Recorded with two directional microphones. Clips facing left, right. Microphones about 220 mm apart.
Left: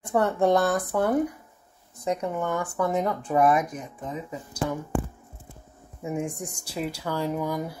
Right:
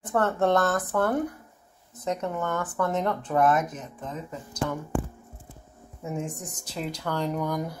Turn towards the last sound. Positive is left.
turn(degrees=5)  # may be behind; listen again after turning